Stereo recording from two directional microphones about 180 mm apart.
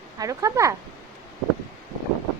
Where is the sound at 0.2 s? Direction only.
20° right (ahead or behind).